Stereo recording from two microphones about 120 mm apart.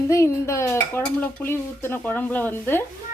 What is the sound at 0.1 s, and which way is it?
A woman's voice, 25° left (ahead or behind).